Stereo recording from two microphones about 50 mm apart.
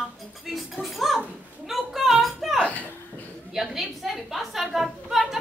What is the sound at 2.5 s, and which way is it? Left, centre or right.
Speech, left.